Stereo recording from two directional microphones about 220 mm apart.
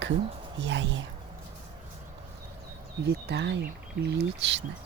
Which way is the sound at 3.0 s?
50° right (ahead or behind).